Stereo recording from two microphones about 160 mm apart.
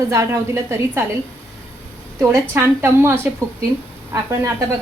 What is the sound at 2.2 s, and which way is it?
A woman's voice, 15° right (ahead or behind).